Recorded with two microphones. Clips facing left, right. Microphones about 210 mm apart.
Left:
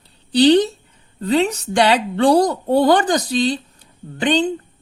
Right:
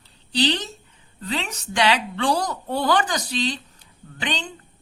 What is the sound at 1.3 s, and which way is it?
A woman's voice, 35° left (ahead or behind).